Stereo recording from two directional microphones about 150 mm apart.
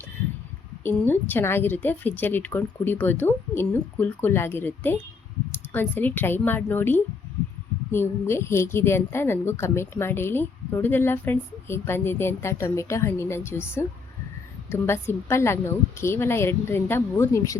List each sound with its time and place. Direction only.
0.9 s a woman's voice: 15° left (ahead or behind)